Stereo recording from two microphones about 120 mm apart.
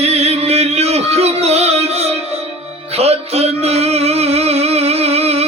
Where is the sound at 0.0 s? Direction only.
60° right (ahead or behind).